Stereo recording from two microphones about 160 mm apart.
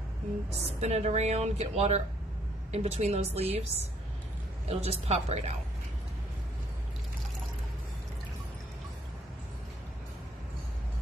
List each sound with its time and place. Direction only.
0.7 s a woman's voice: 45° right (ahead or behind)
4.6 s a woman's voice: 40° right (ahead or behind)